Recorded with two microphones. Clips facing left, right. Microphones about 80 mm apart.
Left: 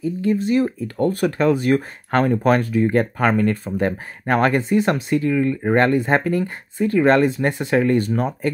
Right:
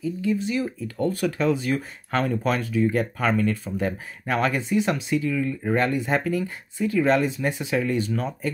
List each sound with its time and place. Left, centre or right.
0.0 s speech: left